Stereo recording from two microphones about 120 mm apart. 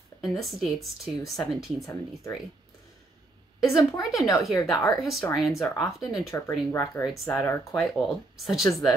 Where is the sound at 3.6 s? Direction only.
25° left (ahead or behind).